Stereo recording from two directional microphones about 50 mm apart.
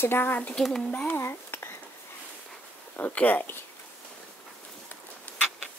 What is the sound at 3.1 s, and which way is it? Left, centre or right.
Speech, left.